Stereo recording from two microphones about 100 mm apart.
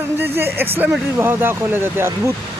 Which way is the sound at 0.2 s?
20° right (ahead or behind).